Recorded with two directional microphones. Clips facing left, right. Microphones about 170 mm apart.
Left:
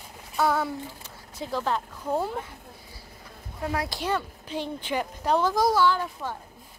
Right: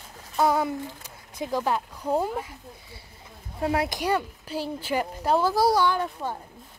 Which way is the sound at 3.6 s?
25° right (ahead or behind).